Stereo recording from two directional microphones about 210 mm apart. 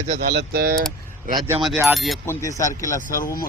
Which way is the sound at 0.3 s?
45° right (ahead or behind).